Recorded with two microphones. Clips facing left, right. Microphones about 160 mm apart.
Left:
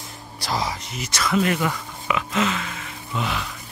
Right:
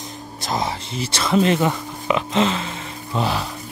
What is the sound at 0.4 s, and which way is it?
Speech, 20° right (ahead or behind).